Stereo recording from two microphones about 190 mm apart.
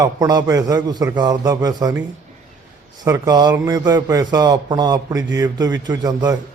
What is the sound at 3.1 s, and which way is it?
Speech, 20° right (ahead or behind).